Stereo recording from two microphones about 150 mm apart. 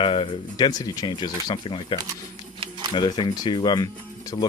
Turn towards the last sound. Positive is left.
turn(degrees=25)  # may be behind; listen again after turning